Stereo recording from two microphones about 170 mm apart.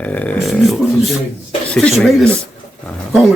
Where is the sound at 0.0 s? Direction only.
10° left (ahead or behind).